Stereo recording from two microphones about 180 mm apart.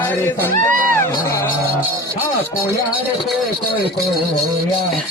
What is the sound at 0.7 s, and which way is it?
Music, 50° right (ahead or behind).